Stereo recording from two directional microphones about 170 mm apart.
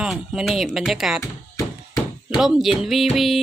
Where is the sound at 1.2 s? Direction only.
20° left (ahead or behind).